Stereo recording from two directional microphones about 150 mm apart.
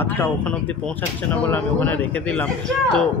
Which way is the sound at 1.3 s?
10° left (ahead or behind).